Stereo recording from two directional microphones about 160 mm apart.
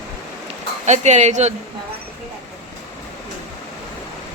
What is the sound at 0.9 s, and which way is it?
Speech, 45° right (ahead or behind).